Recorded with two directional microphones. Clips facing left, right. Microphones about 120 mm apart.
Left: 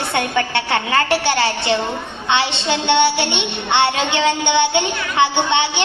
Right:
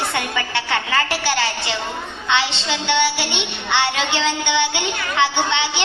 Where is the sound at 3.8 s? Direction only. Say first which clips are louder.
Left 4 dB; 60° left (ahead or behind).